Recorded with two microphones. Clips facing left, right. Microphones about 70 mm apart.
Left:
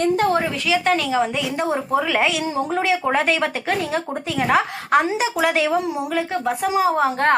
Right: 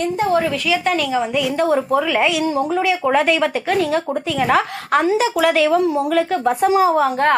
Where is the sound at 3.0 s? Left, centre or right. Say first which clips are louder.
Right 4 dB; left.